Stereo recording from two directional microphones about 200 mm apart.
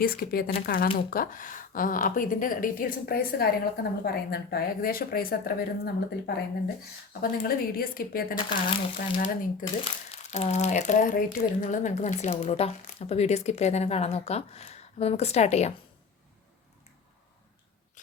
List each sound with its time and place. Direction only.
0.0 s speech: 50° left (ahead or behind)
8.4 s speech: 25° left (ahead or behind)
9.0 s speech: 45° left (ahead or behind)